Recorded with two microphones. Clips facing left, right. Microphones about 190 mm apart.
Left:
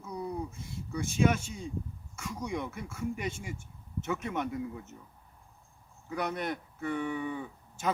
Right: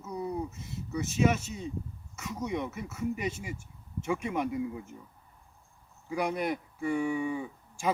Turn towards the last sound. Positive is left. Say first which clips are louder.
# right 2 dB
turn(degrees=-10)  # may be behind; listen again after turning